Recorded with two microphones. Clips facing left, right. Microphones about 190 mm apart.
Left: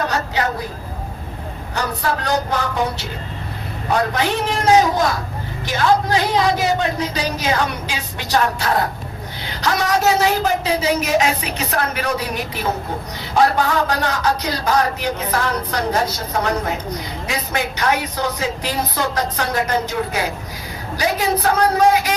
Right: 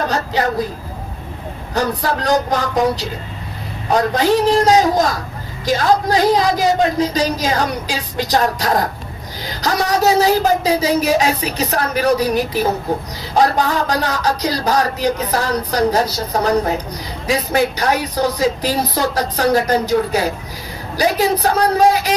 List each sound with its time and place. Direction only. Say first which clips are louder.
1.7 s a man's voice: right 4 dB; 35° right (ahead or behind)